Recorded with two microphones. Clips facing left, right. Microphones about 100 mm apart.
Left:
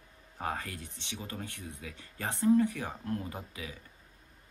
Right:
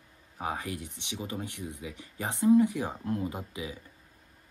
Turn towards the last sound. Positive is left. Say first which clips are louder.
# right 6 dB
turn(degrees=-20)  # may be behind; listen again after turning